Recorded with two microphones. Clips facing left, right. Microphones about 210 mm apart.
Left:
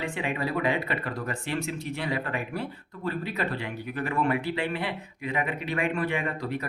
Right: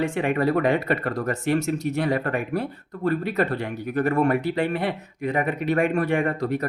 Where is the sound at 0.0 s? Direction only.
50° right (ahead or behind).